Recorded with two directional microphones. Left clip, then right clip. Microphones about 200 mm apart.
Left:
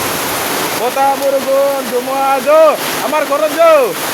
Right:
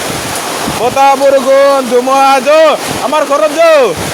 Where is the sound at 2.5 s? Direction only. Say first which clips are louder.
Right 2 dB; 10° right (ahead or behind).